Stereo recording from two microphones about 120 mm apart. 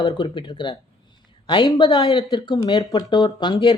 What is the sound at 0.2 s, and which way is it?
Speech, 45° left (ahead or behind).